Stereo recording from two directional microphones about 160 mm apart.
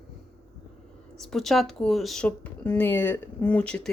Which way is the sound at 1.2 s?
Centre (ahead or behind).